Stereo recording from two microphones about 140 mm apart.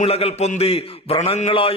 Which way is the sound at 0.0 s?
45° left (ahead or behind).